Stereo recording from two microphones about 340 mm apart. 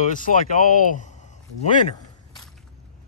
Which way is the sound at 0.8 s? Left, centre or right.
Left.